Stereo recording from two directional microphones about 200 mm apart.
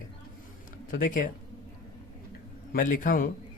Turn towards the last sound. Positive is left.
turn(degrees=45)  # may be behind; listen again after turning